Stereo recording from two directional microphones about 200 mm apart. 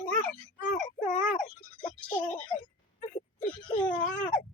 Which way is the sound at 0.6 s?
40° left (ahead or behind).